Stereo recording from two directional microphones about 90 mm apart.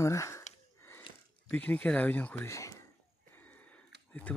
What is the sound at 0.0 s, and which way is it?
Speech, 35° left (ahead or behind).